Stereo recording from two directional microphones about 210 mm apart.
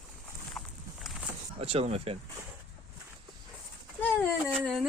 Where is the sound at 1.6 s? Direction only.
25° right (ahead or behind).